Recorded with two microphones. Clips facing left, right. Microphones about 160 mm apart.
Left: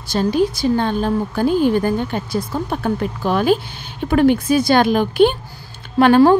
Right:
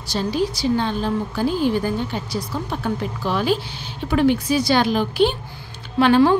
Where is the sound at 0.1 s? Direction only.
50° left (ahead or behind).